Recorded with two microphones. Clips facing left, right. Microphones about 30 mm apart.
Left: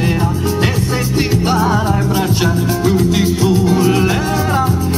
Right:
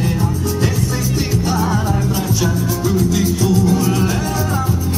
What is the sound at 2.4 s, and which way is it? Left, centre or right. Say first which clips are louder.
Music: left 4 dB; left.